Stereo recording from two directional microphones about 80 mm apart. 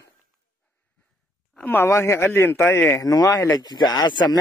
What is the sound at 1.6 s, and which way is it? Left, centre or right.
Speech, left.